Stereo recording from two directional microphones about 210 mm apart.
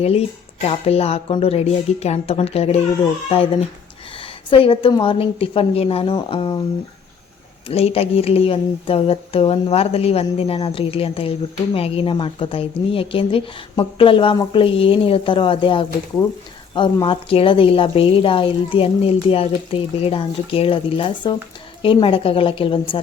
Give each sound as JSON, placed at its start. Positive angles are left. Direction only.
{"t": 0.0, "sound": "a woman's voice", "side_deg": 30}
{"t": 7.7, "sound": "a woman's voice", "side_deg": 30}